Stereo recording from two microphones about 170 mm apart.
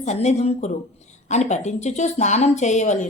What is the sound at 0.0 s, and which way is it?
A woman's voice, 40° left (ahead or behind).